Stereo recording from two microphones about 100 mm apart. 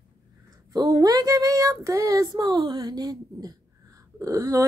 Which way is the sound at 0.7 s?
40° right (ahead or behind).